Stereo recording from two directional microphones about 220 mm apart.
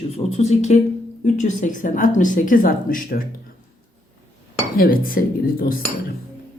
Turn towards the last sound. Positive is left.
turn(degrees=40)  # may be behind; listen again after turning